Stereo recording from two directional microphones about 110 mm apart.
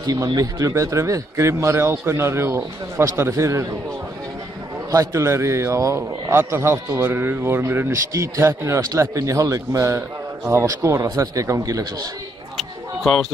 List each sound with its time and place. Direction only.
0.0 s a man's voice: 35° right (ahead or behind)
4.9 s a man's voice: 25° right (ahead or behind)
12.5 s a sound: centre (ahead or behind)